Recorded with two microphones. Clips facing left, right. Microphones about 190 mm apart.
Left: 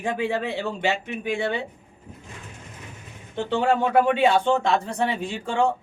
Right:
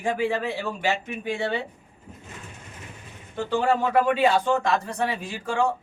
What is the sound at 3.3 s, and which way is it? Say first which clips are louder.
Speech: left 1 dB; 25° left (ahead or behind).